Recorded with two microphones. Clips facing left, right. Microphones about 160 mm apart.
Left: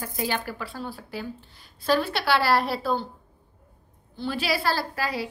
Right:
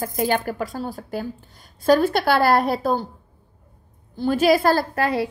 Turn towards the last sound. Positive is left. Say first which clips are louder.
# right 7 dB
turn(degrees=-55)  # may be behind; listen again after turning